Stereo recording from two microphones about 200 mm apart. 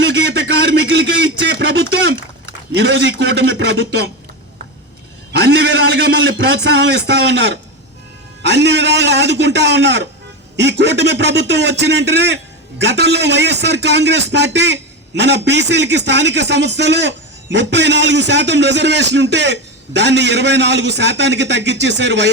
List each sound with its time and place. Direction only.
0.0 s a sound: 60° right (ahead or behind)
2.7 s a man's voice: 60° right (ahead or behind)
5.4 s a man's voice: 60° right (ahead or behind)